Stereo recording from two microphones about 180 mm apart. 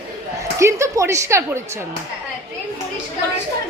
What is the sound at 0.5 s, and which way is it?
Speech, 15° right (ahead or behind).